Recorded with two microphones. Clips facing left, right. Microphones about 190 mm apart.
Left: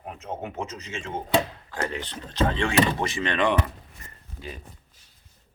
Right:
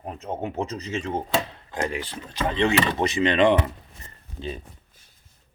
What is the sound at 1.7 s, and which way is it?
Speech, 10° right (ahead or behind).